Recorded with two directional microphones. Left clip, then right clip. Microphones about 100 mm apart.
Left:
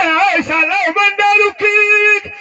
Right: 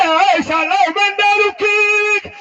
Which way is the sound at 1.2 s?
35° right (ahead or behind).